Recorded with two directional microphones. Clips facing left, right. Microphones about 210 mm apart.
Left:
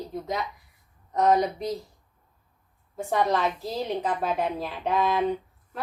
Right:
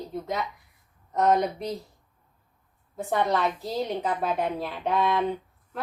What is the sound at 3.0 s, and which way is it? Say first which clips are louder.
A woman's voice: left 1 dB; centre (ahead or behind).